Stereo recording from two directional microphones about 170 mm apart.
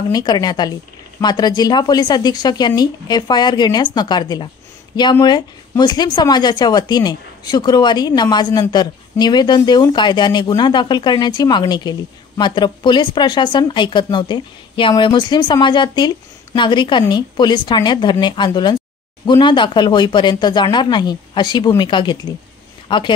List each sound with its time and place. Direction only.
0.1 s speech: 25° left (ahead or behind)